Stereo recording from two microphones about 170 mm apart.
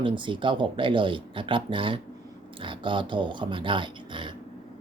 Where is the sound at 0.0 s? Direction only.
30° right (ahead or behind).